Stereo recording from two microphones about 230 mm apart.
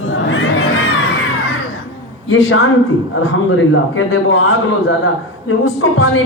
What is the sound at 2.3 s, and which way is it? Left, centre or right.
Speech, left.